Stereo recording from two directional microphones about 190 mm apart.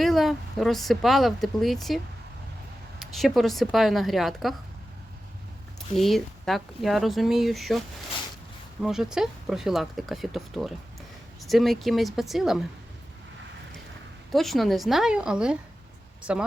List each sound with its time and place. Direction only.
0.0 s a woman's voice: centre (ahead or behind)
3.0 s a woman's voice: centre (ahead or behind)
5.9 s a woman's voice: centre (ahead or behind)
8.8 s a woman's voice: centre (ahead or behind)
14.3 s a woman's voice: centre (ahead or behind)